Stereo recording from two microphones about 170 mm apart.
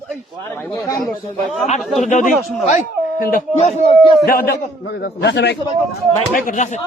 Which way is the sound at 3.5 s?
40° left (ahead or behind).